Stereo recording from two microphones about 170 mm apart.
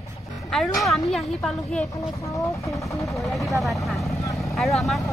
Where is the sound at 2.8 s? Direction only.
Centre (ahead or behind).